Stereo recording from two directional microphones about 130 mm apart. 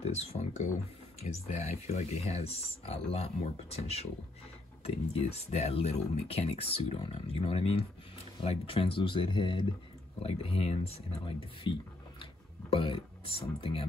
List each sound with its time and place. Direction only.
0.0 s speech: 55° left (ahead or behind)